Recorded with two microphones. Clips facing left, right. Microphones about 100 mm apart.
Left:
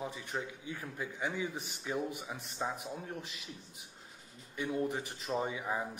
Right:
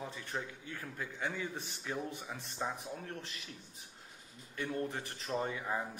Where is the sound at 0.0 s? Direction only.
15° left (ahead or behind).